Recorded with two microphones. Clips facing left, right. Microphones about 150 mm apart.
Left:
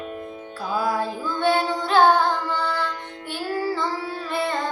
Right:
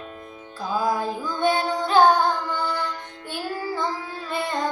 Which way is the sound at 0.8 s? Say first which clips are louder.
Even; 15° right (ahead or behind).